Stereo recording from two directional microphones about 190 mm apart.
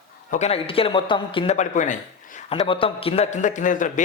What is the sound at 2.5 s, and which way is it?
A man's voice, 30° left (ahead or behind).